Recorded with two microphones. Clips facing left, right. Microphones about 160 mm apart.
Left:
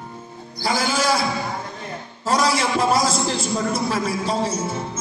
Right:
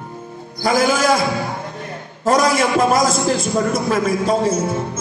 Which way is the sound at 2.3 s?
50° right (ahead or behind).